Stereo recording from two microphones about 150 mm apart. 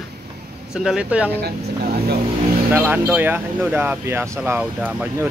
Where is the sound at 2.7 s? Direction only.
10° right (ahead or behind).